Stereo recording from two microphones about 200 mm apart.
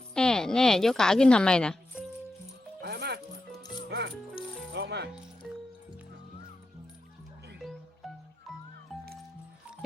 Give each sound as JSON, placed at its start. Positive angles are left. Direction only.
{"t": 0.1, "sound": "a woman's voice", "side_deg": 5}
{"t": 2.8, "sound": "music", "side_deg": -55}
{"t": 3.6, "sound": "music", "side_deg": 20}
{"t": 3.8, "sound": "music", "side_deg": -55}
{"t": 5.4, "sound": "music", "side_deg": 0}
{"t": 7.6, "sound": "music", "side_deg": 0}